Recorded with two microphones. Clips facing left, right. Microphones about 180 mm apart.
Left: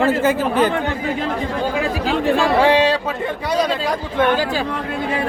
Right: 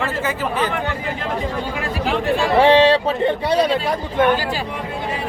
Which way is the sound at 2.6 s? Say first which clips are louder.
Right 2 dB; 25° right (ahead or behind).